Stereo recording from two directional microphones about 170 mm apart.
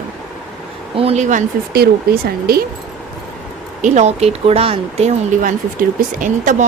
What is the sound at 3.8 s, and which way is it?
Speech, 40° right (ahead or behind).